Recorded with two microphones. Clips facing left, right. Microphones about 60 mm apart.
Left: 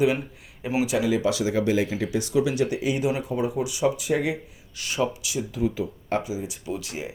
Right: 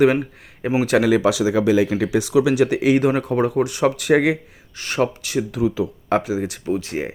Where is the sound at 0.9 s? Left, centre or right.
Right.